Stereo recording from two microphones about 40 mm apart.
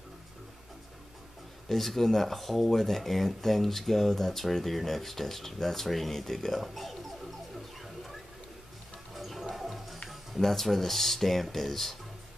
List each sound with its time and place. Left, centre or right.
1.7 s speech: centre
6.6 s music: centre
7.8 s a sound: centre
9.1 s toilet flush: centre
10.4 s speech: centre